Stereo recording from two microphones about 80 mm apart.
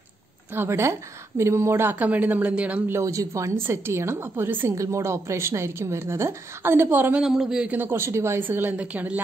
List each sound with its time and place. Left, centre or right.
0.6 s a woman's voice: right; by 2.8 s centre
2.9 s a woman's voice: right
4.7 s a woman's voice: right
7.2 s a man's voice: centre
7.7 s speech: right